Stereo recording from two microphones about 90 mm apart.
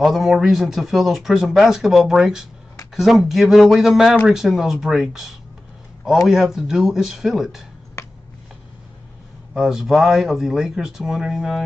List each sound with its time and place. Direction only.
0.0 s speech: centre (ahead or behind)
9.5 s speech: 5° right (ahead or behind)